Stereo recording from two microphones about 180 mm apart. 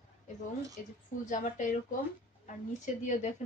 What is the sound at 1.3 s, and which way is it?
A woman's voice, 45° left (ahead or behind).